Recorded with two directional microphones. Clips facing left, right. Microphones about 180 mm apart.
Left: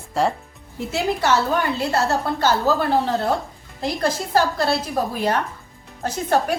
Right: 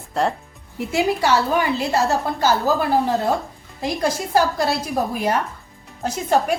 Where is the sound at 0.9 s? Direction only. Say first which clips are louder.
Right 2 dB; 10° right (ahead or behind).